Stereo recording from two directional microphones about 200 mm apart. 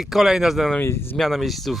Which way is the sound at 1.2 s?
Centre (ahead or behind).